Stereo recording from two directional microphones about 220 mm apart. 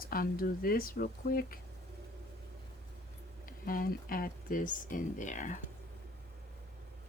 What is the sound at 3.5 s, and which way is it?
Speech, 40° left (ahead or behind).